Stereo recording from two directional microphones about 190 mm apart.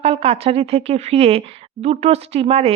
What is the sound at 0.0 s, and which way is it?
Speech, 30° right (ahead or behind).